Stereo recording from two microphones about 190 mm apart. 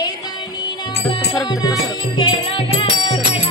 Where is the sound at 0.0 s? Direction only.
20° left (ahead or behind).